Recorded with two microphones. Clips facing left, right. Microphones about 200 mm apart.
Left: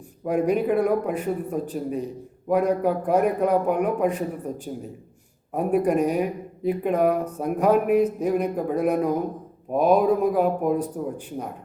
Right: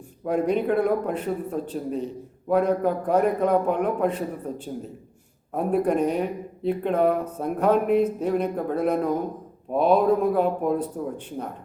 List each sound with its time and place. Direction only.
0.3 s speech: 5° left (ahead or behind)